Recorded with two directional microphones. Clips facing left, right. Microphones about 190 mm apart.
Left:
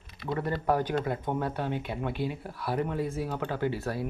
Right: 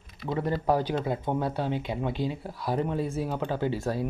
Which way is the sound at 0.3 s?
15° right (ahead or behind).